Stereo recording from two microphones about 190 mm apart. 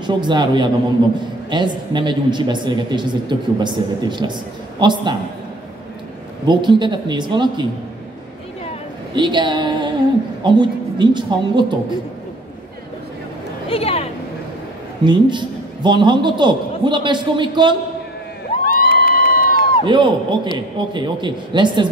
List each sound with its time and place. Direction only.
0.0 s a man's voice: 25° right (ahead or behind)
6.4 s a man's voice: 25° right (ahead or behind)
9.1 s a man's voice: 25° right (ahead or behind)
13.7 s a sound: 30° left (ahead or behind)
15.0 s a man's voice: 25° right (ahead or behind)
18.6 s crowd: 50° left (ahead or behind)
19.8 s a man's voice: 25° right (ahead or behind)